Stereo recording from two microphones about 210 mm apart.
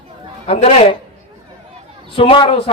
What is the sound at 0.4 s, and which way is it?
Speech, 30° left (ahead or behind).